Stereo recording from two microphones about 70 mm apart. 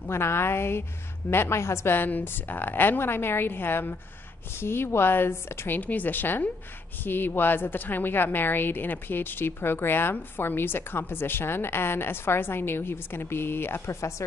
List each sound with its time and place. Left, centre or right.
0.0 s a woman's voice: left
2.0 s a woman's voice: left